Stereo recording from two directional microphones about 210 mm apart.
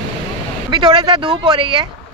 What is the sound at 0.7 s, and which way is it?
Speech, 20° right (ahead or behind).